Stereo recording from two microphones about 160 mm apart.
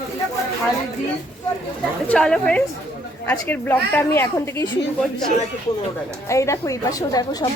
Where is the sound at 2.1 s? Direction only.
5° left (ahead or behind).